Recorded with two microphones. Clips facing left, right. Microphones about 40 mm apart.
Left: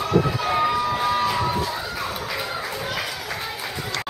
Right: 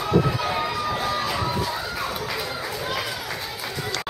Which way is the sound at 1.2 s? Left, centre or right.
Centre.